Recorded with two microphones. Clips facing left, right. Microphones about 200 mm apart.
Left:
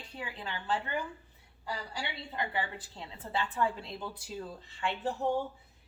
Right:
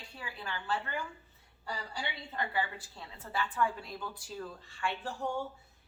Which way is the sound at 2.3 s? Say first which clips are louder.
Even; 20° left (ahead or behind).